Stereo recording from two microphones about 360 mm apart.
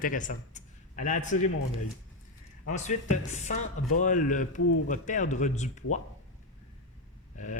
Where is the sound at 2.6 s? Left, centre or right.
Centre.